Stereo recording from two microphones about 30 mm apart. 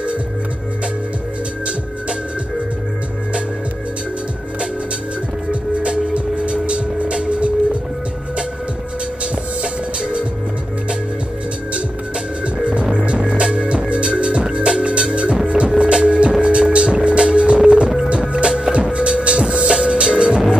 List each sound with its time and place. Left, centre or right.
5.5 s music: right
9.6 s music: right
12.9 s music: right
17.6 s a sound: right
18.3 s music: right